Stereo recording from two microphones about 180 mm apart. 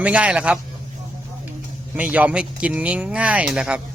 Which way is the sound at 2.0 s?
10° right (ahead or behind).